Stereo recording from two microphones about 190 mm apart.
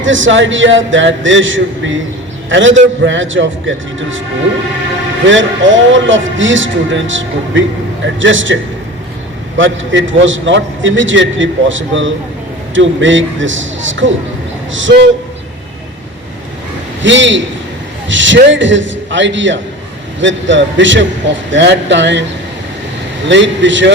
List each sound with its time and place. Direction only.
0.0 s a man's voice: 85° right
5.3 s a man's voice: 80° right
9.6 s a man's voice: 90° right
17.0 s a man's voice: 75° right (ahead or behind)
23.3 s a man's voice: 75° right (ahead or behind)